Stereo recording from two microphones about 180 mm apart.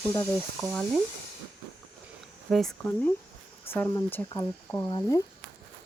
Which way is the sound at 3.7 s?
10° left (ahead or behind).